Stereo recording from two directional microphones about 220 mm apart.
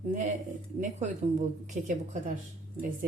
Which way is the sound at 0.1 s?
35° right (ahead or behind).